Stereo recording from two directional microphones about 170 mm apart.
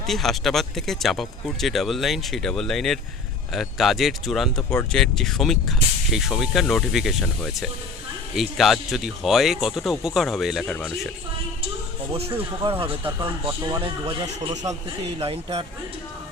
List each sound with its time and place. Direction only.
0.0 s speech: centre (ahead or behind)
12.8 s speech: 30° right (ahead or behind)
13.5 s speech: 20° right (ahead or behind); by 15.6 s 35° right (ahead or behind)